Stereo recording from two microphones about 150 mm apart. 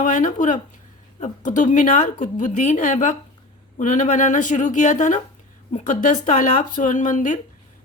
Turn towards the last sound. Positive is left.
turn(degrees=60)  # may be behind; listen again after turning